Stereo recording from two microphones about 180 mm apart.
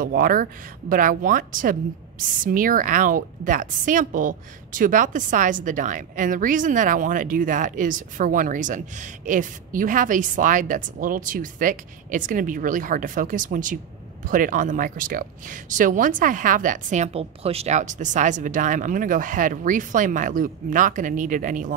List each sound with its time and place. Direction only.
0.0 s speech: 50° right (ahead or behind)